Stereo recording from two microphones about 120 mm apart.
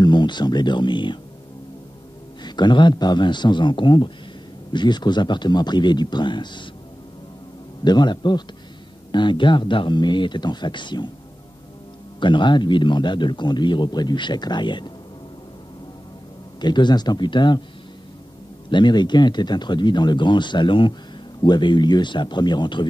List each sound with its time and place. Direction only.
0.0 s speech: 40° left (ahead or behind)
2.4 s a man's voice: 40° left (ahead or behind)
7.8 s a man's voice: 35° left (ahead or behind)
12.2 s a man's voice: 40° left (ahead or behind)
16.6 s a man's voice: 40° left (ahead or behind)
18.7 s a man's voice: 40° left (ahead or behind)